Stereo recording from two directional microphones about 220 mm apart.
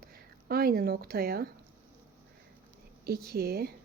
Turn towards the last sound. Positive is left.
turn(degrees=-45)  # may be behind; listen again after turning